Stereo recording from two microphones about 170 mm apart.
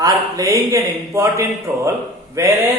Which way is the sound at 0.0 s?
20° right (ahead or behind).